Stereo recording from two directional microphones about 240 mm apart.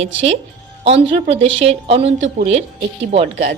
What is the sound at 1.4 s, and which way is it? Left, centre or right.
Speech, right.